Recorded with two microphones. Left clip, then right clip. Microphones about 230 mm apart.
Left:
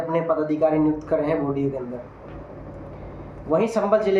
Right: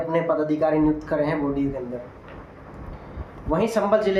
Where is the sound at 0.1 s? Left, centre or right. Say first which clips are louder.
Even; centre.